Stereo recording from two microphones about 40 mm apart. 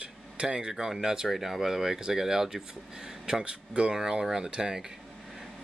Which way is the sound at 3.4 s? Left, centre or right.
Right.